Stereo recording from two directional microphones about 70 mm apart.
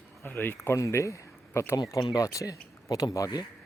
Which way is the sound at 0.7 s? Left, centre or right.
Left.